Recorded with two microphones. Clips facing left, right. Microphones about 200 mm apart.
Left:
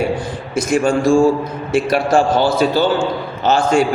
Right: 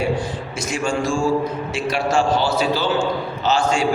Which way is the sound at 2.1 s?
50° left (ahead or behind).